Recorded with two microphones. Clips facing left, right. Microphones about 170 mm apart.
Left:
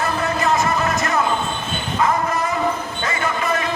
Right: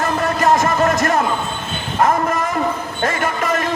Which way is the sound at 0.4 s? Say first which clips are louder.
Right 5 dB; 45° right (ahead or behind).